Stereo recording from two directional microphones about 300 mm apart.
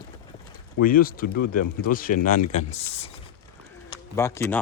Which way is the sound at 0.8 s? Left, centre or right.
Left.